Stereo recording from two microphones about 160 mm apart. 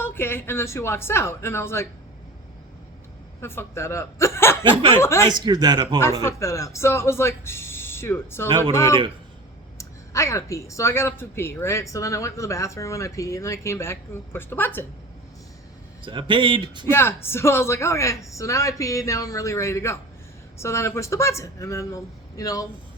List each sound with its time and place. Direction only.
0.0 s speech: 15° left (ahead or behind)
3.4 s a woman's voice: 15° left (ahead or behind)
4.7 s speech: 35° right (ahead or behind)
4.9 s speech: 20° left (ahead or behind)
5.3 s speech: 25° right (ahead or behind)
6.2 s speech: 20° left (ahead or behind)
16.0 s speech: 30° right (ahead or behind)
16.9 s speech: 15° left (ahead or behind)